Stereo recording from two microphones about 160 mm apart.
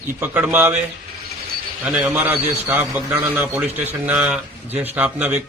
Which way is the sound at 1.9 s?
5° right (ahead or behind).